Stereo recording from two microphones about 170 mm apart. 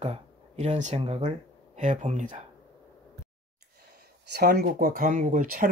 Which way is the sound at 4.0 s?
65° right (ahead or behind).